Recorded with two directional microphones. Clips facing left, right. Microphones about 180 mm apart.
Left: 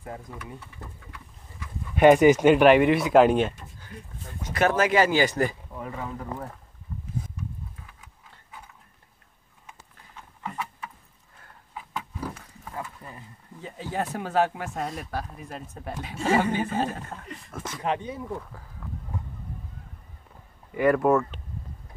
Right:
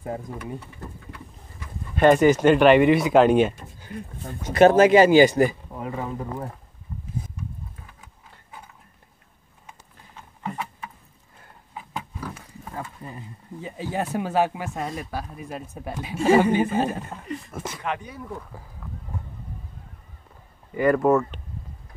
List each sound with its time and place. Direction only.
0.0 s speech: 30° right (ahead or behind)
2.0 s speech: 15° left (ahead or behind)
4.5 s speech: 25° right (ahead or behind)
5.8 s speech: 25° right (ahead or behind)
10.4 s a sound: 20° right (ahead or behind)
13.6 s speech: 10° right (ahead or behind)
17.8 s speech: 25° left (ahead or behind)
20.7 s speech: centre (ahead or behind)